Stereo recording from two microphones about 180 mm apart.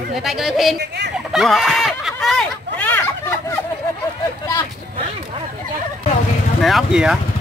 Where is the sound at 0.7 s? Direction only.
70° right (ahead or behind).